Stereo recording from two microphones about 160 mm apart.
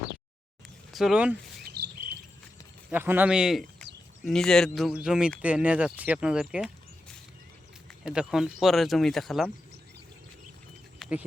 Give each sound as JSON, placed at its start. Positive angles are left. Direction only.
{"t": 0.9, "sound": "speech", "side_deg": -5}
{"t": 1.6, "sound": "chirp", "side_deg": -75}
{"t": 2.9, "sound": "speech", "side_deg": -10}
{"t": 7.9, "sound": "speech", "side_deg": -5}
{"t": 11.0, "sound": "a sound", "side_deg": 0}